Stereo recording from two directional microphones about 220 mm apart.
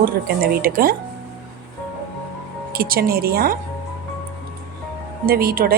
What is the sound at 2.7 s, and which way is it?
Speech, 40° right (ahead or behind).